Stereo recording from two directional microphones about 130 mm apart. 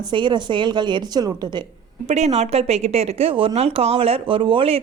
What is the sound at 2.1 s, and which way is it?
Speech, 55° right (ahead or behind).